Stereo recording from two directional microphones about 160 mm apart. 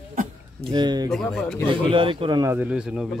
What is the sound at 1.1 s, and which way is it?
Speech, centre (ahead or behind).